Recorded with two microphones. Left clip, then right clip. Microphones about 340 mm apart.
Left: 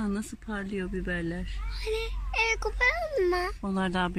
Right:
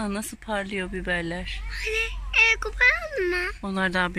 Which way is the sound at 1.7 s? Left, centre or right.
Centre.